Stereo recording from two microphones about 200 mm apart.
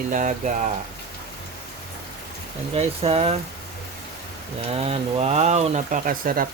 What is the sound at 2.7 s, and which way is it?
Speech, 30° right (ahead or behind).